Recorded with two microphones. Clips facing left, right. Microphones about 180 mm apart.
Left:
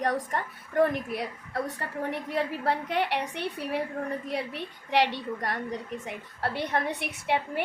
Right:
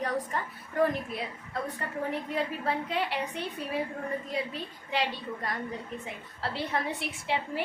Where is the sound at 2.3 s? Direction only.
70° left (ahead or behind).